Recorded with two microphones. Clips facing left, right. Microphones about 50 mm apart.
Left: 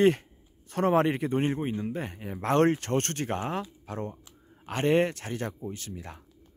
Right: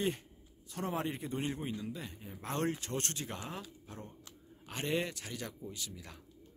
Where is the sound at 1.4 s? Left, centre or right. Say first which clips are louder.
Left 9 dB; left.